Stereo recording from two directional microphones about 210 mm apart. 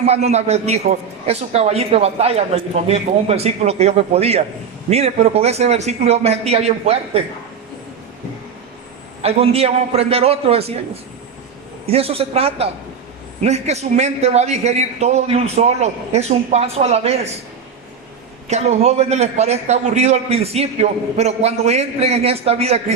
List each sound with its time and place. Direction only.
0.0 s a man's voice: 30° right (ahead or behind)
9.2 s a man's voice: 30° right (ahead or behind)
11.9 s a man's voice: 30° right (ahead or behind)
18.4 s a man's voice: 30° right (ahead or behind)